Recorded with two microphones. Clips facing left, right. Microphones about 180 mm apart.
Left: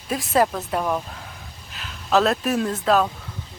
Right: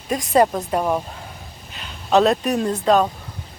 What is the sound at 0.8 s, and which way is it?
Speech, 20° right (ahead or behind).